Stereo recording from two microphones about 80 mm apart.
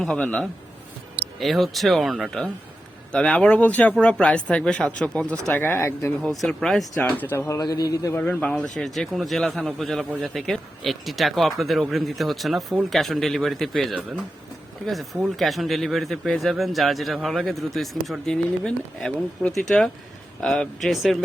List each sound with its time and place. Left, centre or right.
0.2 s speech: centre
1.4 s speech: centre
3.1 s speech: centre
5.5 s speech: left
6.4 s speech: centre
7.0 s speech: left
7.3 s a man's voice: left
8.2 s speech: centre
8.5 s speech: centre